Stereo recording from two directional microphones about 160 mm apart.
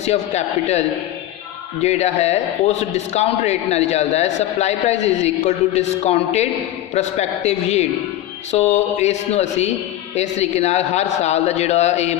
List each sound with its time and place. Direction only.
0.0 s a man's voice: 45° left (ahead or behind)